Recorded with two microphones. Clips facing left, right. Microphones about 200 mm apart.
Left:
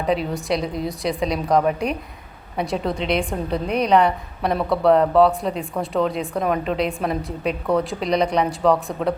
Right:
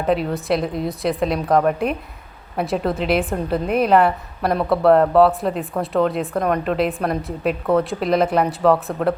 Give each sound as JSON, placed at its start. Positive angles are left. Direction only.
{"t": 0.0, "sound": "a woman's voice", "side_deg": 0}